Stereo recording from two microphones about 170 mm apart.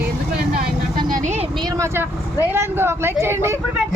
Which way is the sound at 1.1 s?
45° right (ahead or behind).